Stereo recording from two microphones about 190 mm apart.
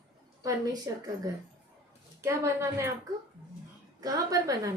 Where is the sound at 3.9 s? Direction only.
20° right (ahead or behind).